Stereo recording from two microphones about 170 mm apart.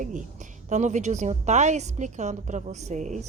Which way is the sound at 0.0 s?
50° right (ahead or behind).